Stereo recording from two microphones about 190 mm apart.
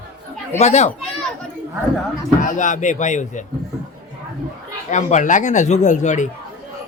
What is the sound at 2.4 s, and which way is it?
Speech, 40° left (ahead or behind).